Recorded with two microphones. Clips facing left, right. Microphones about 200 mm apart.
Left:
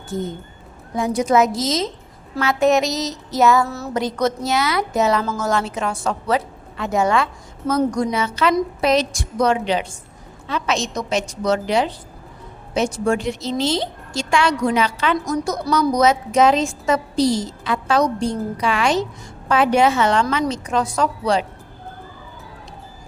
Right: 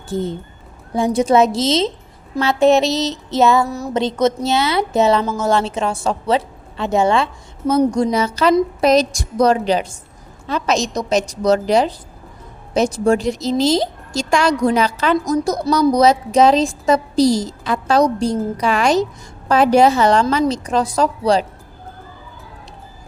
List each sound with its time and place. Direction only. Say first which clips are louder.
0.1 s a woman's voice: right 4 dB; 30° right (ahead or behind)
3.7 s a woman's voice: right 3 dB; 15° right (ahead or behind)
5.2 s speech: right 3 dB; 15° right (ahead or behind)
5.5 s a woman's voice: right 5 dB; 30° right (ahead or behind)
8.1 s a woman's voice: right 4 dB; 40° right (ahead or behind)